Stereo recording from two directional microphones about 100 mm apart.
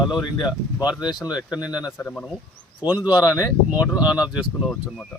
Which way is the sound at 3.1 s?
40° left (ahead or behind).